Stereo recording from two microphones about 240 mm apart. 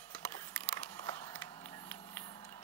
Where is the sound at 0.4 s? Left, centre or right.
Centre.